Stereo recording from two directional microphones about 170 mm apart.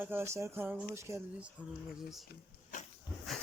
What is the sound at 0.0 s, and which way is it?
Speech, 15° right (ahead or behind).